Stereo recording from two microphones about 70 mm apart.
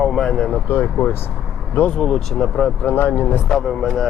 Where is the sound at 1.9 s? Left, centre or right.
Centre.